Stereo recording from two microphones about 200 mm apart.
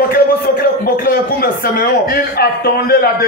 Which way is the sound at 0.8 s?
50° left (ahead or behind).